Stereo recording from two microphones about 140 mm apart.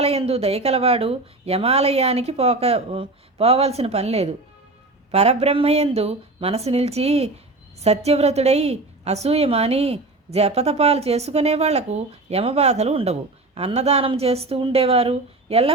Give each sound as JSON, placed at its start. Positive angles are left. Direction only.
{"t": 0.0, "sound": "a woman's voice", "side_deg": -45}